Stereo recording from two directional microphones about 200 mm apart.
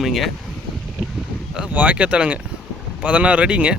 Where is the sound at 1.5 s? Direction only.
5° right (ahead or behind).